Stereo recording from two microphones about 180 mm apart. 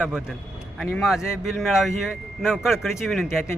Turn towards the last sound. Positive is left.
turn(degrees=0)  # may be behind; listen again after turning